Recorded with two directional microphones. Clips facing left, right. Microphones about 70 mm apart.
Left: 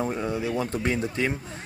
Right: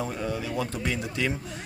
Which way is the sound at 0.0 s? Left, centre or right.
Left.